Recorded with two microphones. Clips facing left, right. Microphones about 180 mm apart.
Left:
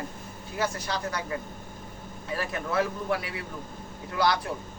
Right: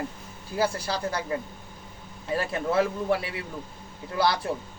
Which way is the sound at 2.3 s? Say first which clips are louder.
Right 4 dB; 25° right (ahead or behind).